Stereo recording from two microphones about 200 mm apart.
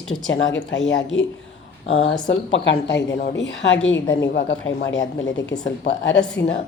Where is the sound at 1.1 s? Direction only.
70° left (ahead or behind).